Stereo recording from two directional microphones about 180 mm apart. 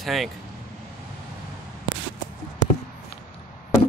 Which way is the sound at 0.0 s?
Centre (ahead or behind).